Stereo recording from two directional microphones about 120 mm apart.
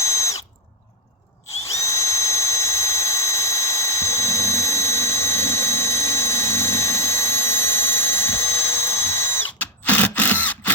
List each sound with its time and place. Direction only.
0.0 s drill: 25° left (ahead or behind)
1.7 s drill: 25° left (ahead or behind)